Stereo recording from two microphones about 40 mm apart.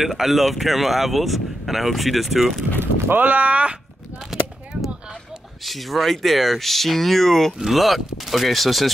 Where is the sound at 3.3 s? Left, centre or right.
Right.